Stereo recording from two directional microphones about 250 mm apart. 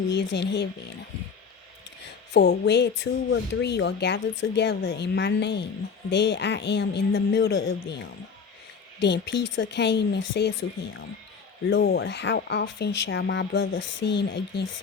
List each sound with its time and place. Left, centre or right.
0.1 s speech: left
2.3 s a woman's voice: left
11.7 s speech: left